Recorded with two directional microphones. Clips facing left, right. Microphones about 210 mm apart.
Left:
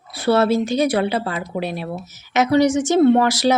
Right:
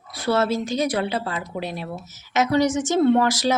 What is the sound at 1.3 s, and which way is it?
Speech, 15° left (ahead or behind).